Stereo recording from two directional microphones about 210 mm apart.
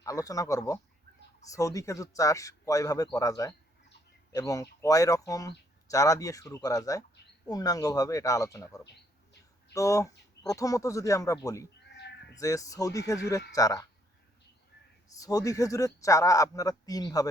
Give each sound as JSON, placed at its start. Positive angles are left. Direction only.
{"t": 0.0, "sound": "speech", "side_deg": 15}
{"t": 11.9, "sound": "a sound", "side_deg": 55}
{"t": 12.4, "sound": "speech", "side_deg": 15}
{"t": 15.1, "sound": "speech", "side_deg": 15}